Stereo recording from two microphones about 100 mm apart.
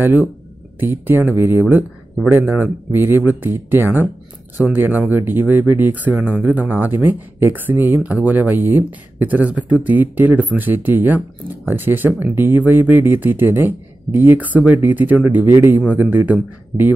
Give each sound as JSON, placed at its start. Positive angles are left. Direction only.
{"t": 0.0, "sound": "speech", "side_deg": -20}